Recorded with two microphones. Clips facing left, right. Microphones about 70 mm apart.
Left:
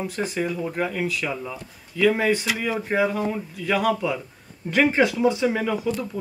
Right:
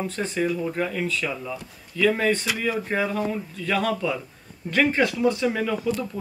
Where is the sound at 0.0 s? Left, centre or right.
Centre.